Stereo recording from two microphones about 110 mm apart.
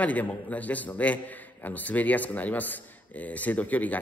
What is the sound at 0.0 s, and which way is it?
A man's voice, 15° left (ahead or behind).